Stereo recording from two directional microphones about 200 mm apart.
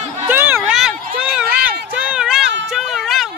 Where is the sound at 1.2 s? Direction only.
5° right (ahead or behind).